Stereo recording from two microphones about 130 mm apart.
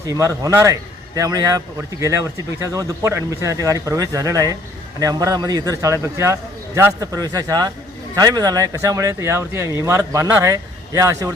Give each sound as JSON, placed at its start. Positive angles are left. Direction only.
{"t": 0.1, "sound": "a man's voice", "side_deg": -25}